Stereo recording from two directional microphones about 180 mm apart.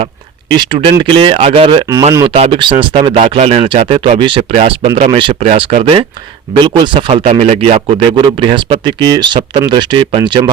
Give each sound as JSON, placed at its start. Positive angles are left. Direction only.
{"t": 0.5, "sound": "speech", "side_deg": -25}